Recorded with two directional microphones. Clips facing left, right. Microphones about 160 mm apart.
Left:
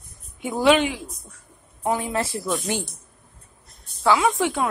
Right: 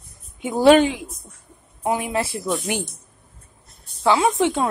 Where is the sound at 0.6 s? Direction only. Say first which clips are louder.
Right 5 dB; 40° right (ahead or behind).